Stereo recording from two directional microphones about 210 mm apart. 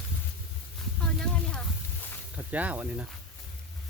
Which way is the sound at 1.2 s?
5° left (ahead or behind).